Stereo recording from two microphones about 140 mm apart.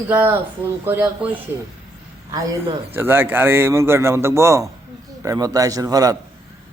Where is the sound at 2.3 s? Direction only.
25° right (ahead or behind).